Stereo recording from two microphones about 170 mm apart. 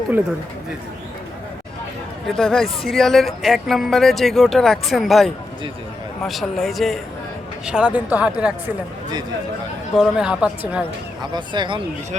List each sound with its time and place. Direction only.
2.3 s speech: 5° left (ahead or behind)
10.0 s speech: 5° right (ahead or behind)
11.2 s speech: 25° right (ahead or behind)